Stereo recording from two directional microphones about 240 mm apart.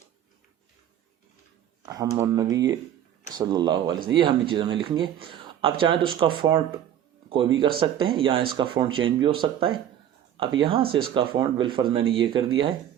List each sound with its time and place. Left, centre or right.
1.8 s speech: centre